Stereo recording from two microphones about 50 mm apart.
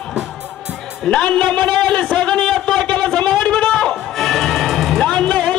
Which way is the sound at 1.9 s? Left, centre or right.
Centre.